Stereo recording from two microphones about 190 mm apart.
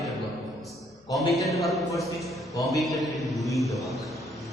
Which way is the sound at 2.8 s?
Centre (ahead or behind).